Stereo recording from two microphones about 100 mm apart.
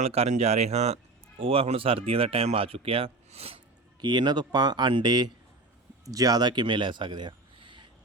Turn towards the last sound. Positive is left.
turn(degrees=-55)  # may be behind; listen again after turning